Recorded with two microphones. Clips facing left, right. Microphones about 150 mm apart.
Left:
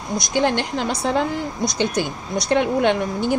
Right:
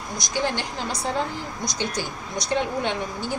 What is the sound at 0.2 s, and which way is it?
A woman's voice, 60° left (ahead or behind).